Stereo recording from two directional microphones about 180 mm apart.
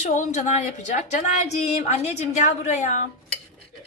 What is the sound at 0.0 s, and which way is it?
Speech, 45° left (ahead or behind).